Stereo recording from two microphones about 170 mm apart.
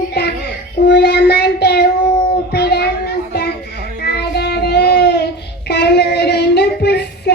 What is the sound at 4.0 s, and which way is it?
Child singing, 75° left (ahead or behind).